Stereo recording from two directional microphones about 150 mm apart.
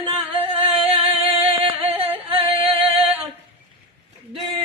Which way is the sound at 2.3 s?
40° right (ahead or behind).